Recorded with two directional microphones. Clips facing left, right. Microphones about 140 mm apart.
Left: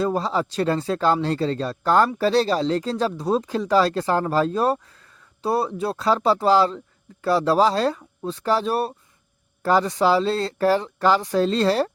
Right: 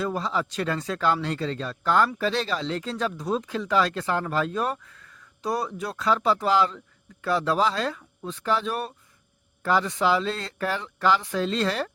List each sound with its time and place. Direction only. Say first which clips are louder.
0.0 s speech: left 5 dB; 35° left (ahead or behind)